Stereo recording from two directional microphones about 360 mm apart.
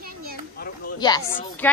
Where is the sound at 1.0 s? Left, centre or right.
Centre.